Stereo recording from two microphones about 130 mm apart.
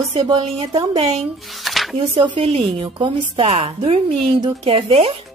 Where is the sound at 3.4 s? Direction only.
50° right (ahead or behind).